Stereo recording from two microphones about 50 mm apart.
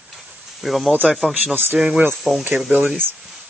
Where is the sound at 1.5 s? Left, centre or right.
Right.